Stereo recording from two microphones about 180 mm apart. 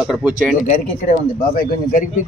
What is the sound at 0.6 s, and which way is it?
Speech, 45° left (ahead or behind).